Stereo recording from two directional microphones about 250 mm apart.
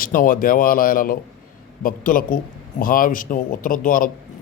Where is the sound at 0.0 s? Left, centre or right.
Left.